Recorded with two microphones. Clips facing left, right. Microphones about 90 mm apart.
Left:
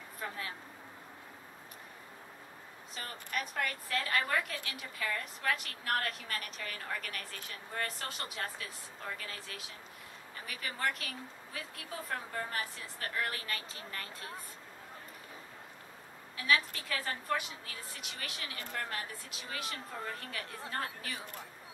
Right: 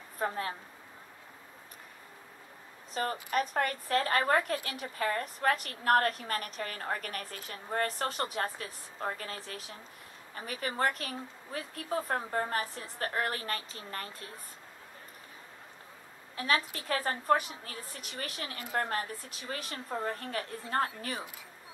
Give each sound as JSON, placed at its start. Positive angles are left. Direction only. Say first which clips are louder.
{"t": 0.2, "sound": "a woman's voice", "louder": "right 8 dB", "side_deg": -40}
{"t": 2.9, "sound": "a woman's voice", "louder": "right 9 dB", "side_deg": -40}
{"t": 16.3, "sound": "a woman's voice", "louder": "right 1 dB", "side_deg": -40}